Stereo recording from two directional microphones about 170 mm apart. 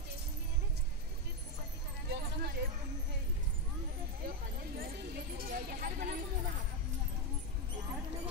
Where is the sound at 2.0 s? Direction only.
65° right (ahead or behind).